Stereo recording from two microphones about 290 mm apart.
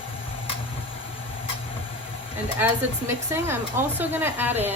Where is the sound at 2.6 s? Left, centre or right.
Centre.